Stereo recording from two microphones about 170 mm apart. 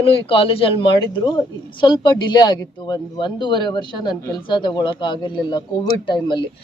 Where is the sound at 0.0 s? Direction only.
35° left (ahead or behind).